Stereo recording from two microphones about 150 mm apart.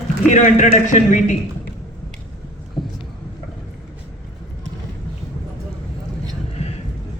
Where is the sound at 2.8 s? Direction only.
30° left (ahead or behind).